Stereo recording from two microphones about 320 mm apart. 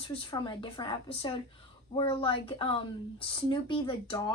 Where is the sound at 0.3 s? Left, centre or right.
Centre.